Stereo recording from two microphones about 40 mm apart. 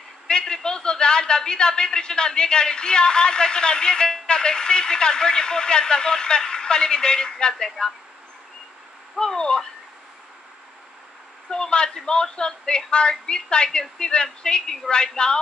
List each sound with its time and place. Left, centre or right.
0.3 s a man's voice: centre
9.2 s speech: centre
11.5 s speech: centre